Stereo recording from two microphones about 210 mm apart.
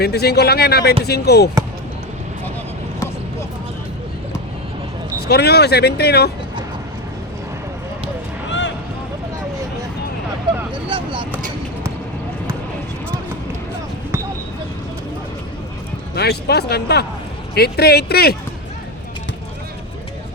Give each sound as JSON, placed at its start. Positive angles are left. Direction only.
{"t": 0.0, "sound": "speech", "side_deg": 50}
{"t": 5.3, "sound": "speech", "side_deg": 50}
{"t": 8.4, "sound": "a sound", "side_deg": 60}
{"t": 10.8, "sound": "vehicle", "side_deg": -25}
{"t": 16.1, "sound": "speech", "side_deg": 50}